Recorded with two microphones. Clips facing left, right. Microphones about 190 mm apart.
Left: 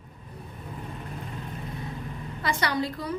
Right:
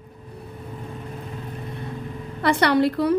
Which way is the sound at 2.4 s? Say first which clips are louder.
Right 9 dB; 65° right (ahead or behind).